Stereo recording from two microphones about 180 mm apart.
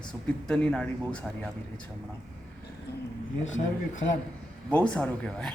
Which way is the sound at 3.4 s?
90° left.